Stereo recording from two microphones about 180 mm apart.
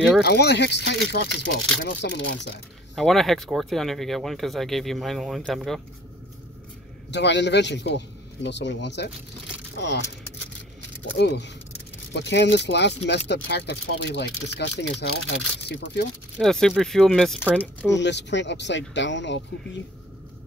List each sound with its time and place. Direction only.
0.2 s speech: 65° left (ahead or behind)
3.0 s speech: centre (ahead or behind)
7.1 s speech: 75° left (ahead or behind)
11.1 s speech: 70° left (ahead or behind)
16.3 s speech: centre (ahead or behind)
17.9 s speech: 75° left (ahead or behind)